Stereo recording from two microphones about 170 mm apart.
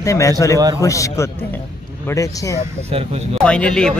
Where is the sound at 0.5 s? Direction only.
20° right (ahead or behind).